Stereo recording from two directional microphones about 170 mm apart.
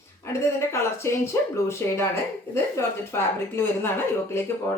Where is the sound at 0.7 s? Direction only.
15° left (ahead or behind).